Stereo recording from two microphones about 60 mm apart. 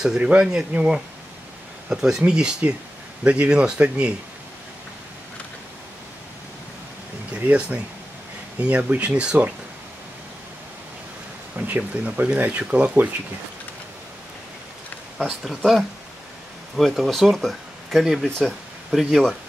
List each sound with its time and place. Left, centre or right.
0.0 s speech: centre
8.5 s speech: right
11.5 s speech: right
15.2 s speech: centre